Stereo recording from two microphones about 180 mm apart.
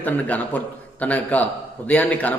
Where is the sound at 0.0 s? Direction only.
10° left (ahead or behind).